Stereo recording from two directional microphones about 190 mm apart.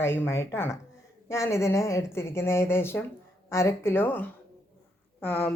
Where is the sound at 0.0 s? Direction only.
15° left (ahead or behind).